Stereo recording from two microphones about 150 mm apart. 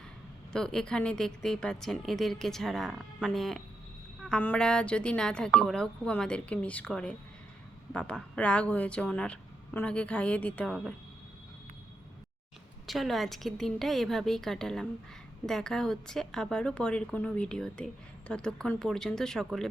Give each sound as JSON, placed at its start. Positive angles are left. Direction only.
{"t": 0.5, "sound": "a woman's voice", "side_deg": 5}
{"t": 12.9, "sound": "a woman's voice", "side_deg": 0}